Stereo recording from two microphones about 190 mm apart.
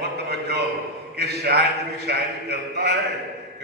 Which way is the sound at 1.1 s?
60° right (ahead or behind).